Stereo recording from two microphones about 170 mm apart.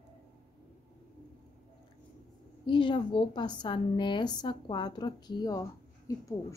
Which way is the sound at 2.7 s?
30° left (ahead or behind).